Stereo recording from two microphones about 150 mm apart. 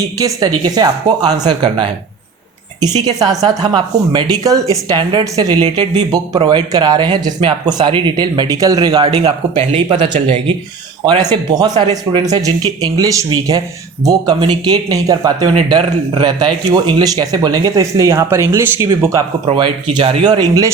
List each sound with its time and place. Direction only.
0.2 s speech: 25° right (ahead or behind)
3.0 s speech: 25° right (ahead or behind)
11.2 s speech: 25° right (ahead or behind)
19.5 s speech: 30° right (ahead or behind)